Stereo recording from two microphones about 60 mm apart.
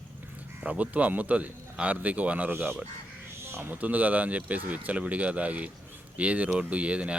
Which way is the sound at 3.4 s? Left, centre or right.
Right.